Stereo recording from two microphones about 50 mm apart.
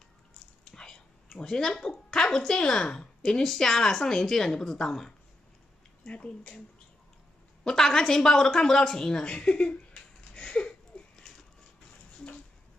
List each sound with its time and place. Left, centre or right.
0.7 s a woman's voice: centre
6.0 s speech: left
7.6 s a woman's voice: centre
10.3 s a sound: centre